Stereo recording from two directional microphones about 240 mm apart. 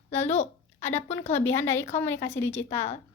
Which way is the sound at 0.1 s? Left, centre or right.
Left.